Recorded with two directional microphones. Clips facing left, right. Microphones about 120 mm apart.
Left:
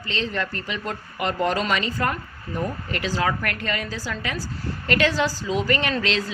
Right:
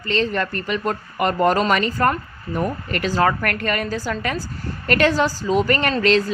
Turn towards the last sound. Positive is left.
turn(degrees=-45)  # may be behind; listen again after turning